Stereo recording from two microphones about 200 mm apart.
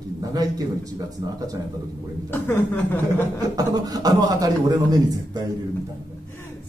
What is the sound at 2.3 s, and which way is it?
Speech, 10° left (ahead or behind).